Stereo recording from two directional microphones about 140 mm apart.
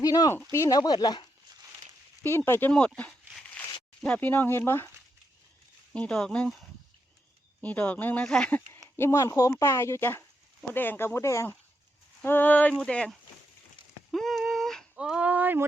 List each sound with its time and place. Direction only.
0.0 s speech: 25° left (ahead or behind)
2.2 s speech: 15° left (ahead or behind)
5.9 s speech: 10° left (ahead or behind)
9.0 s speech: 20° left (ahead or behind); by 15.6 s 15° right (ahead or behind)